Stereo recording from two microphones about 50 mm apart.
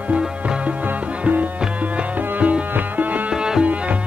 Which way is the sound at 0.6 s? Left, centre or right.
Right.